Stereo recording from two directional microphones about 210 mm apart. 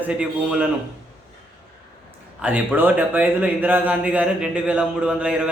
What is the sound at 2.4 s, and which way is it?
Speech, 5° right (ahead or behind).